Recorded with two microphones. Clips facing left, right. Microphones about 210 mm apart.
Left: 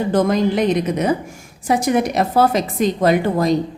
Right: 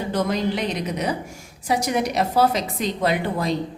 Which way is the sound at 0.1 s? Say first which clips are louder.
Left 6 dB; 50° left (ahead or behind).